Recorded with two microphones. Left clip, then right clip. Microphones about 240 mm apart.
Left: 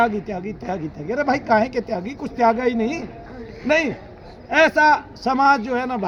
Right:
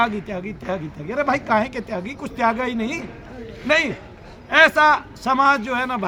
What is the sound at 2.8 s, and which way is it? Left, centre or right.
Speech, right.